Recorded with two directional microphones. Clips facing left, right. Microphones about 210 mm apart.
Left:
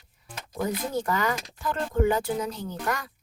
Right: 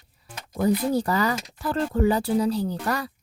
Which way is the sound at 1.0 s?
35° right (ahead or behind).